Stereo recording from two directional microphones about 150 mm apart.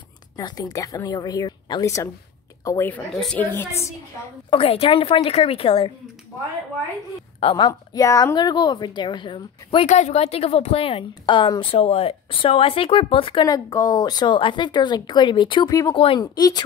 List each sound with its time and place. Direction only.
0.4 s a woman's voice: 25° left (ahead or behind)
2.9 s a woman's voice: 5° left (ahead or behind)
4.5 s a woman's voice: 40° left (ahead or behind)
7.3 s a woman's voice: 35° left (ahead or behind)
9.8 s a woman's voice: 50° left (ahead or behind); by 16.6 s 25° left (ahead or behind)